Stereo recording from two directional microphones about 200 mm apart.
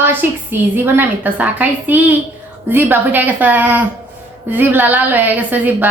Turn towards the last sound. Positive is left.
turn(degrees=-10)  # may be behind; listen again after turning